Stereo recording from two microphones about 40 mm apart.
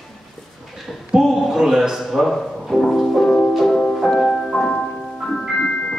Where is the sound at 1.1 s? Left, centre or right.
Centre.